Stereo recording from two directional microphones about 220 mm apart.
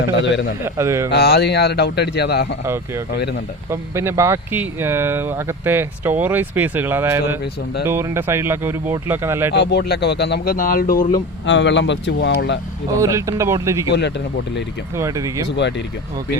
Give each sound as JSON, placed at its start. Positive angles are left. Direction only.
{"t": 0.1, "sound": "a man's voice", "side_deg": 55}
{"t": 0.6, "sound": "speech", "side_deg": -10}
{"t": 1.1, "sound": "a man's voice", "side_deg": 50}
{"t": 2.6, "sound": "speech", "side_deg": -10}
{"t": 9.5, "sound": "a man's voice", "side_deg": 50}
{"t": 11.4, "sound": "a man's voice", "side_deg": 55}
{"t": 13.0, "sound": "speech", "side_deg": -15}
{"t": 13.9, "sound": "a man's voice", "side_deg": 50}
{"t": 14.9, "sound": "speech", "side_deg": -15}
{"t": 15.4, "sound": "a man's voice", "side_deg": 55}